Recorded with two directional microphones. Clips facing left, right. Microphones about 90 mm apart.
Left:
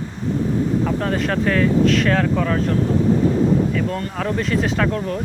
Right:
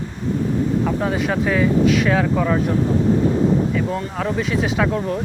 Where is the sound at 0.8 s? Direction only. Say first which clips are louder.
Even; 5° right (ahead or behind).